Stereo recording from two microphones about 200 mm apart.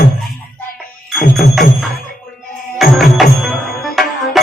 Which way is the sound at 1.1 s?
Centre (ahead or behind).